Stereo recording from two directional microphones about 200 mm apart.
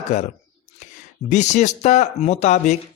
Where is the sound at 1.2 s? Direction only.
35° left (ahead or behind).